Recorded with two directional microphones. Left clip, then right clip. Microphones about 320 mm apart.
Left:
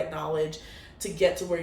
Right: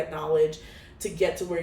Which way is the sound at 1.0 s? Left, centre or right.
Centre.